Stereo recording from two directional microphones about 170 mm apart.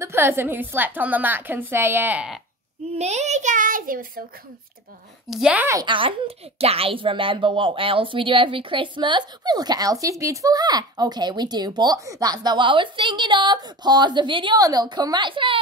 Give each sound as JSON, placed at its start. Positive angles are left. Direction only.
{"t": 0.0, "sound": "a woman's voice", "side_deg": -15}
{"t": 2.9, "sound": "child singing", "side_deg": -40}
{"t": 5.3, "sound": "a woman's voice", "side_deg": -5}
{"t": 5.9, "sound": "a child's voice", "side_deg": -30}